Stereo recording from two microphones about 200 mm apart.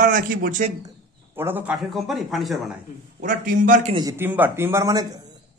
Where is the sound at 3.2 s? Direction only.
40° right (ahead or behind).